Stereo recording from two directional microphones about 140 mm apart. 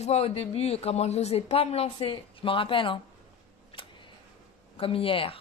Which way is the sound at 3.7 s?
35° left (ahead or behind).